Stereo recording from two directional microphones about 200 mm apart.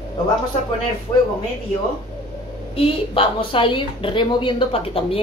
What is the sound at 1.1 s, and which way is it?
Speech, 20° left (ahead or behind).